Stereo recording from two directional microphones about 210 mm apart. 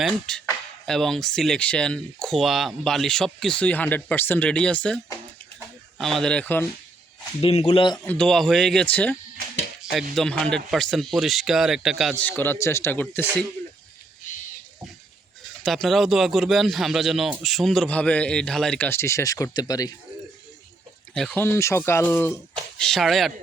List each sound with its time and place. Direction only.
0.1 s a man's voice: 5° left (ahead or behind)
5.5 s a sound: centre (ahead or behind)
7.4 s speech: 30° left (ahead or behind)
7.9 s a man's voice: 5° left (ahead or behind)
12.2 s speech: 10° left (ahead or behind)
15.4 s a man's voice: centre (ahead or behind); by 19.9 s 20° left (ahead or behind)
21.1 s a man's voice: 5° left (ahead or behind)